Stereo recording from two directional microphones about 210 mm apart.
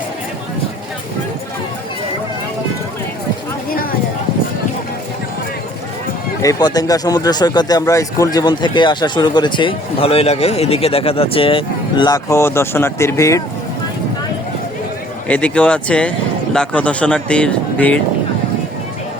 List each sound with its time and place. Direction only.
6.4 s speech: 15° left (ahead or behind)
15.3 s speech: 5° left (ahead or behind)